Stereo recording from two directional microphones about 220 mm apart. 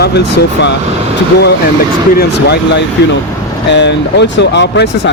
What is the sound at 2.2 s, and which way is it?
Speech, 50° left (ahead or behind).